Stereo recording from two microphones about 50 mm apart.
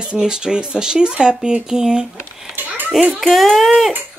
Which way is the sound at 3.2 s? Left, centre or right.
Centre.